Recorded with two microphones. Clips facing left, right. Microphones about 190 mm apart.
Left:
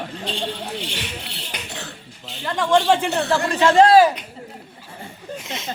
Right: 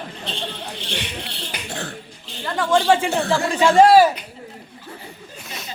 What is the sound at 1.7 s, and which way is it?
Cough, 55° right (ahead or behind).